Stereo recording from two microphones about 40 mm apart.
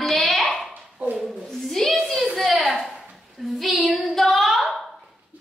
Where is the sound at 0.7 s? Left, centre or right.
Right.